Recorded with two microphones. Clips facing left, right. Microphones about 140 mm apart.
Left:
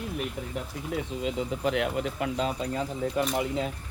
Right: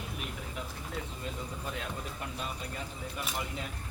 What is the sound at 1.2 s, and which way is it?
Speech, 85° left.